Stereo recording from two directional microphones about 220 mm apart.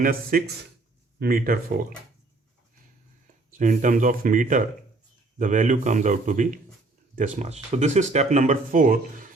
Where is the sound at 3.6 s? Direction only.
35° right (ahead or behind).